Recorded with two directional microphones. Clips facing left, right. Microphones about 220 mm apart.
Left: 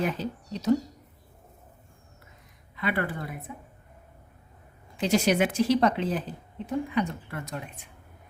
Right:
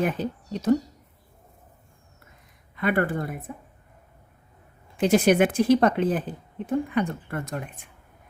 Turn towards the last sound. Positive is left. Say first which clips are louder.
# right 4 dB
turn(degrees=-50)  # may be behind; listen again after turning